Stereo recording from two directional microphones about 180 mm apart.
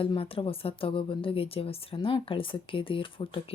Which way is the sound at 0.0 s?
30° left (ahead or behind).